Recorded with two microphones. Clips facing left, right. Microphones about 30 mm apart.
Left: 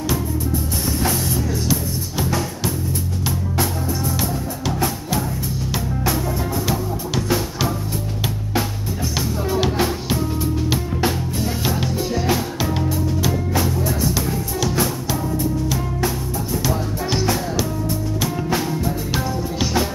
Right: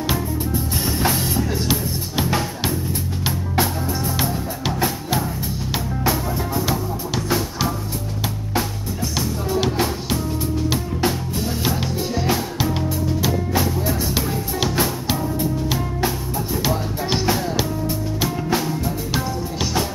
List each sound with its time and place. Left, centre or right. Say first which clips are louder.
0.8 s music: right 1 dB; right
4.2 s music: right 1 dB; right
6.0 s music: right 1 dB; centre
9.5 s music: left 1 dB; centre
14.1 s music: even; right
16.6 s music: even; right
18.5 s music: even; centre